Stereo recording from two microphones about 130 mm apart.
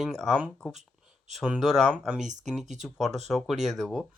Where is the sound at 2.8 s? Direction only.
Centre (ahead or behind).